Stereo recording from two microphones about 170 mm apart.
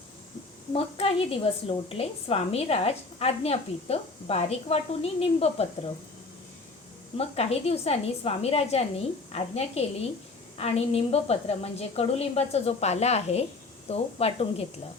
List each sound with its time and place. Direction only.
0.7 s a woman's voice: 35° left (ahead or behind)
7.2 s a woman's voice: 35° left (ahead or behind)